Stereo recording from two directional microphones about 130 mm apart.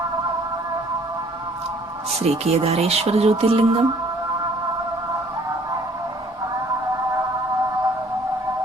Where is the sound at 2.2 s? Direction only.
50° right (ahead or behind).